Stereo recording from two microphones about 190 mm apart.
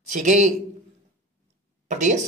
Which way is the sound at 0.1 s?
40° right (ahead or behind).